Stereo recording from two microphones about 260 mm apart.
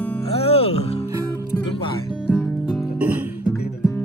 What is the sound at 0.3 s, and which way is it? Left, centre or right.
Music, left.